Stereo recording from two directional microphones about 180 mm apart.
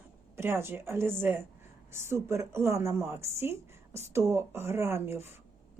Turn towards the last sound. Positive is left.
turn(degrees=-15)  # may be behind; listen again after turning